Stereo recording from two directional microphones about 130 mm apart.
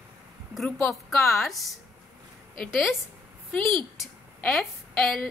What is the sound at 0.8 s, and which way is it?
A woman's voice, 5° left (ahead or behind).